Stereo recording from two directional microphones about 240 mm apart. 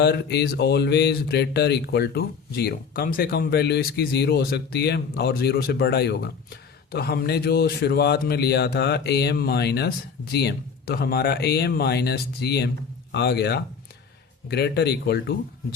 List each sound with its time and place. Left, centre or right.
0.0 s speech: left